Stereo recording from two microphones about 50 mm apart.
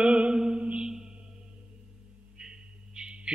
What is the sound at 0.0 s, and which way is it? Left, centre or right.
Mantra, centre.